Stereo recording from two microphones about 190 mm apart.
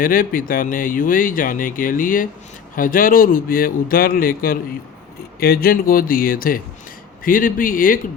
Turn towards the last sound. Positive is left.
turn(degrees=45)  # may be behind; listen again after turning